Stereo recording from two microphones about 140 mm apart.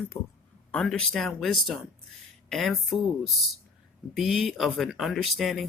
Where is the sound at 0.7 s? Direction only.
5° left (ahead or behind).